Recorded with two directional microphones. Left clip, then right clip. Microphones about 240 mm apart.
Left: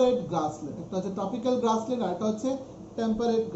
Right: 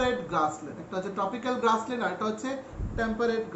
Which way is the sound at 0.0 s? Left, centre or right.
Centre.